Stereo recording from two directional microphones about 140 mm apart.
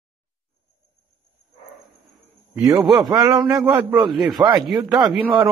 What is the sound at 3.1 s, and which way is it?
Speech, 30° right (ahead or behind).